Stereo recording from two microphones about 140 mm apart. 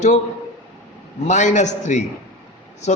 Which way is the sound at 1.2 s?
55° left (ahead or behind).